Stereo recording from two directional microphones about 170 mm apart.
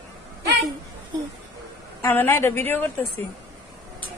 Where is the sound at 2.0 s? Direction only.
15° left (ahead or behind).